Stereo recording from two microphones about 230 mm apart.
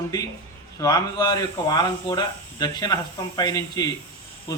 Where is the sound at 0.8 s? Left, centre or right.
Centre.